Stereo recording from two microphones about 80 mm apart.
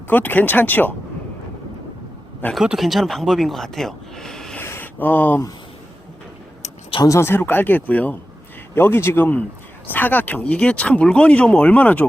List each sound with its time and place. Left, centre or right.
0.1 s speech: left
2.7 s speech: centre
4.6 s a sound: left
7.0 s speech: left
7.3 s speech: left
8.7 s speech: left